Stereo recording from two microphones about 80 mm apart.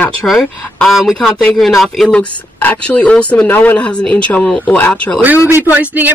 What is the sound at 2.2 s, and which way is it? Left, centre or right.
Speech, centre.